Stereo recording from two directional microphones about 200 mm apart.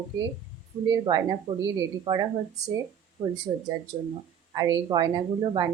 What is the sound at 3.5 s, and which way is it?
A woman's voice, 20° right (ahead or behind).